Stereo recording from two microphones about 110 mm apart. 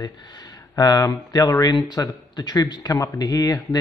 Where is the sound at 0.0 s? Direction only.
40° left (ahead or behind).